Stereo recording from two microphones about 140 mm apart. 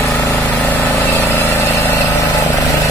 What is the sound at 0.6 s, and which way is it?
Vehicle, 15° left (ahead or behind).